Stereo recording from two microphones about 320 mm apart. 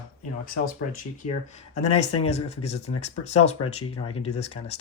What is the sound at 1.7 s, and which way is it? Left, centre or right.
Speech, left.